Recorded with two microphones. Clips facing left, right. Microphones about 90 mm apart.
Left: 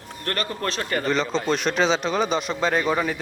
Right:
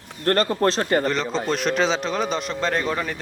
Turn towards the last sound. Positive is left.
turn(degrees=5)  # may be behind; listen again after turning